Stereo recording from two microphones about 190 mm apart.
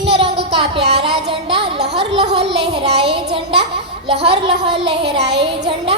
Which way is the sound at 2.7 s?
30° right (ahead or behind).